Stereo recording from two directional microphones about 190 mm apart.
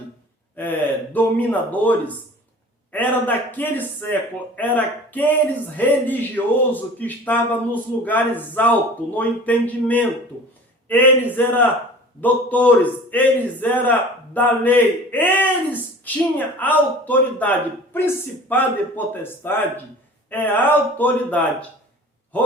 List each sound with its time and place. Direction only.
0.5 s a man's voice: 10° left (ahead or behind)